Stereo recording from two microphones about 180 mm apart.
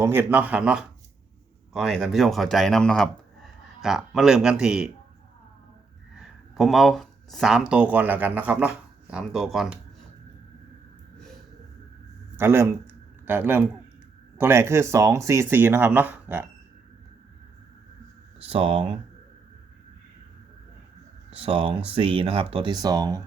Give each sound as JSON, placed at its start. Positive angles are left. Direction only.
{"t": 0.0, "sound": "speech", "side_deg": -15}
{"t": 6.1, "sound": "speech", "side_deg": 0}
{"t": 12.4, "sound": "speech", "side_deg": -15}
{"t": 18.4, "sound": "speech", "side_deg": -30}
{"t": 21.2, "sound": "speech", "side_deg": -30}